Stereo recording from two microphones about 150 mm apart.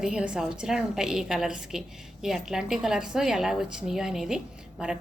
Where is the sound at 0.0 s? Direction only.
5° right (ahead or behind).